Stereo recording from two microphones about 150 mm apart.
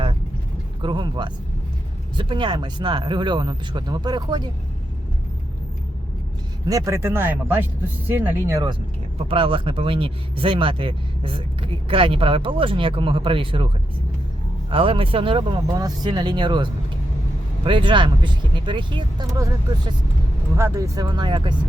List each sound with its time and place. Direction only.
0.8 s speech: 30° right (ahead or behind)
6.7 s speech: 20° right (ahead or behind)
9.3 s speech: 35° right (ahead or behind)
14.7 s speech: 35° right (ahead or behind)